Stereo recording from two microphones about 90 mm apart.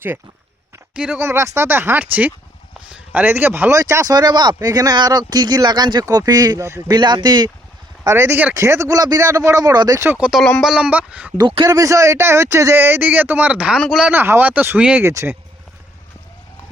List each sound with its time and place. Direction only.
0.9 s speech: 10° right (ahead or behind)
1.2 s a man's voice: 30° right (ahead or behind)
3.7 s speech: 35° right (ahead or behind)
4.1 s speech: 50° right (ahead or behind)
8.0 s a man's voice: 25° right (ahead or behind); by 10.0 s 45° right (ahead or behind)
10.2 s speech: 10° right (ahead or behind)
10.8 s speech: 15° right (ahead or behind)
11.4 s speech: 65° right (ahead or behind)
11.7 s a man's voice: 40° right (ahead or behind); by 13.7 s 10° right (ahead or behind)
14.1 s a man's voice: 25° right (ahead or behind)
15.0 s speech: 30° right (ahead or behind)